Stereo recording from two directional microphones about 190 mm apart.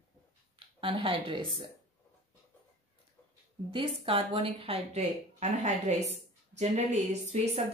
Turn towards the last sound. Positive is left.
turn(degrees=-35)  # may be behind; listen again after turning